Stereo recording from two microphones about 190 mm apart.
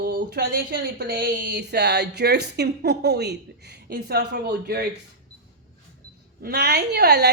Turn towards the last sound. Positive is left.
turn(degrees=-60)  # may be behind; listen again after turning